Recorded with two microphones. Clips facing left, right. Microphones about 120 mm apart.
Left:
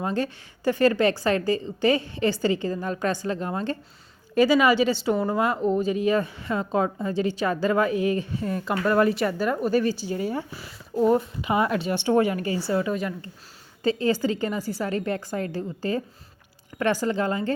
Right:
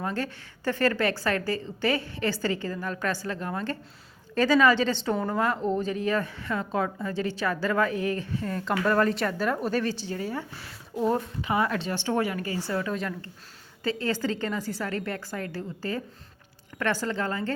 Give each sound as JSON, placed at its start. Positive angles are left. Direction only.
{"t": 0.0, "sound": "a woman's voice", "side_deg": 20}
{"t": 10.2, "sound": "speech", "side_deg": 15}
{"t": 10.5, "sound": "a woman's voice", "side_deg": 5}